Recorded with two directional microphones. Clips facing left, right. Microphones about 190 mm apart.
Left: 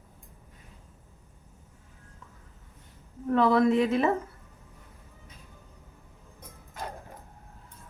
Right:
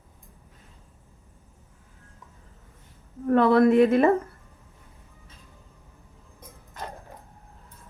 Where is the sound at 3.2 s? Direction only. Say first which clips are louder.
Right 4 dB; 60° right (ahead or behind).